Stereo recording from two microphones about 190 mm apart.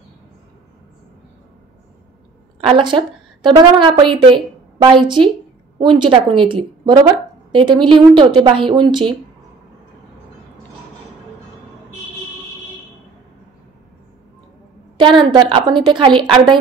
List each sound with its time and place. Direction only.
2.6 s a woman's voice: 25° right (ahead or behind)
15.0 s a woman's voice: 25° right (ahead or behind)